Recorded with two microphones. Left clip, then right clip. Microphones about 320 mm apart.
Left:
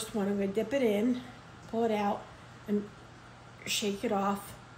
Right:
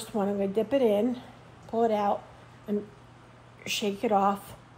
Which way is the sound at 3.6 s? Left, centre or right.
Centre.